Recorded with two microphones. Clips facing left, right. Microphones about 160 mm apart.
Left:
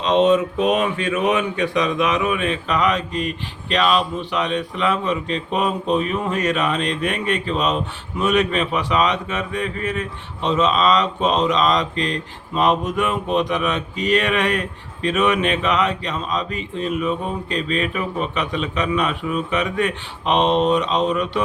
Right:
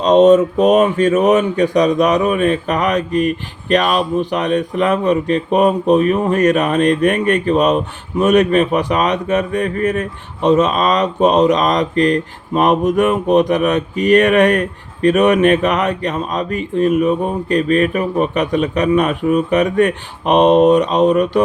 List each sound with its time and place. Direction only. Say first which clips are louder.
0.0 s speech: right 7 dB; 45° right (ahead or behind)